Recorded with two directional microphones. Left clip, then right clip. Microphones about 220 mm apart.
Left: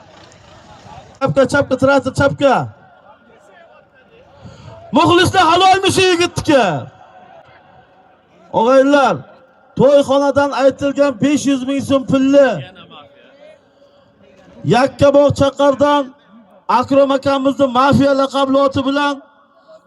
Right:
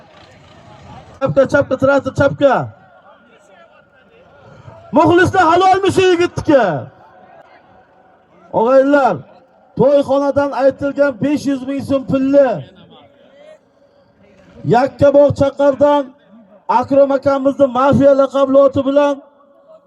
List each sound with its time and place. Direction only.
1.2 s a man's voice: 35° left (ahead or behind)
4.9 s a man's voice: 25° left (ahead or behind)
8.5 s a man's voice: 20° left (ahead or behind); by 13.0 s 35° left (ahead or behind)
14.7 s a man's voice: 25° left (ahead or behind)